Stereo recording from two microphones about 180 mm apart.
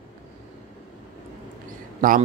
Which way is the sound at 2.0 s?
50° right (ahead or behind).